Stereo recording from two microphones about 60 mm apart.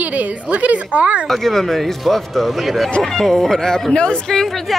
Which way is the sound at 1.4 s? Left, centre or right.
Centre.